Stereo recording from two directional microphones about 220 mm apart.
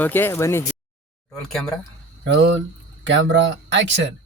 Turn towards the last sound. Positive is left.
turn(degrees=-55)  # may be behind; listen again after turning